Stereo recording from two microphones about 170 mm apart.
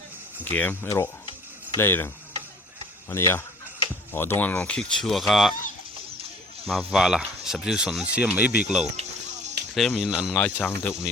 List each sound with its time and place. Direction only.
0.5 s speech: 10° left (ahead or behind)
3.1 s speech: 15° left (ahead or behind); by 5.5 s centre (ahead or behind)
6.7 s speech: centre (ahead or behind)
9.0 s a sound: 45° right (ahead or behind)
9.7 s speech: centre (ahead or behind)
10.3 s speech: 10° left (ahead or behind)